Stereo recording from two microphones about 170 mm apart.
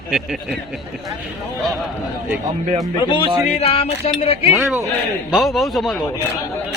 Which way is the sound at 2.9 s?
25° left (ahead or behind).